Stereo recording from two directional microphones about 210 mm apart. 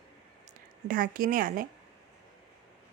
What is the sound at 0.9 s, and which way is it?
Speech, 40° right (ahead or behind).